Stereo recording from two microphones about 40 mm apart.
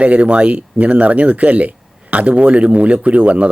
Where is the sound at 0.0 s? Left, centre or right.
Right.